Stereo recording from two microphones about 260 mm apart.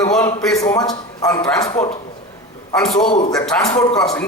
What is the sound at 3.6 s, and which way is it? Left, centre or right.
Speech, centre.